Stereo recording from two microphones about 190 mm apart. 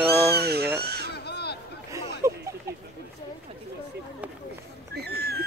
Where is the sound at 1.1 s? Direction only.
60° left (ahead or behind).